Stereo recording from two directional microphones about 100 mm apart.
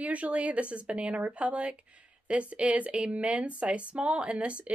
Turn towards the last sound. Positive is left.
turn(degrees=-10)  # may be behind; listen again after turning